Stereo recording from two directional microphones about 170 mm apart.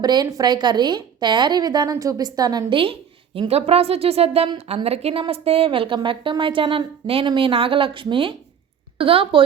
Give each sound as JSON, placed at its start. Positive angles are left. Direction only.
{"t": 0.0, "sound": "a woman's voice", "side_deg": -25}